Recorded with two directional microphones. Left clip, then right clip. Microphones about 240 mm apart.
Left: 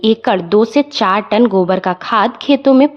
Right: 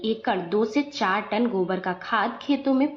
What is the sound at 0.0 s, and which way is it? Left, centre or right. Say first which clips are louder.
A woman's voice: left 12 dB; left.